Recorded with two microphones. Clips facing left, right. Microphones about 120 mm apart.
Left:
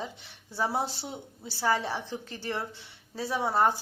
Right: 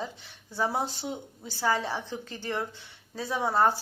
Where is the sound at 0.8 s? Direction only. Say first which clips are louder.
Right 1 dB; 30° left (ahead or behind).